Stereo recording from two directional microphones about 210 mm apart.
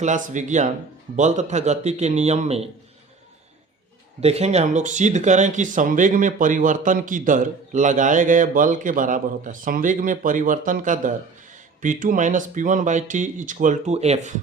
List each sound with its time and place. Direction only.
0.0 s speech: 35° right (ahead or behind)
4.2 s speech: 30° right (ahead or behind)